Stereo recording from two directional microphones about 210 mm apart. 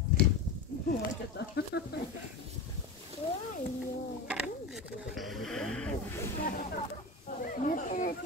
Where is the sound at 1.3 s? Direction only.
55° left (ahead or behind).